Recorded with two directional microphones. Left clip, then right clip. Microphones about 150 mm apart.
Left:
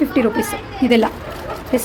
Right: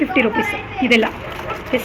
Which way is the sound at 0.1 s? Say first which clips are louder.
Right 1 dB; 25° left (ahead or behind).